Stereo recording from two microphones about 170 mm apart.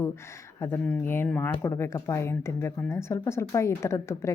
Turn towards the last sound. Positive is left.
turn(degrees=15)  # may be behind; listen again after turning